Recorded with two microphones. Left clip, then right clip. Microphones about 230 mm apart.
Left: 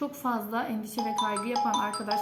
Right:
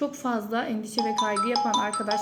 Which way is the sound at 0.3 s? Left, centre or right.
Centre.